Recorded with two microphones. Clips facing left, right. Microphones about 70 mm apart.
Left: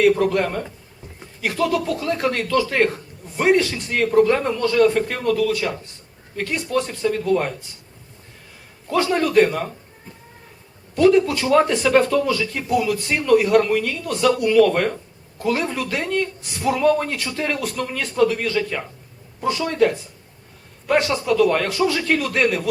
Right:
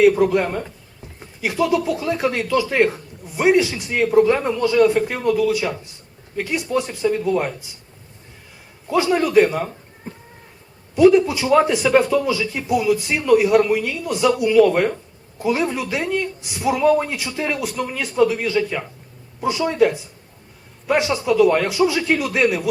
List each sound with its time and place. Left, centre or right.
0.0 s speech: centre
8.9 s a man's voice: centre
10.1 s cat: right
10.9 s speech: centre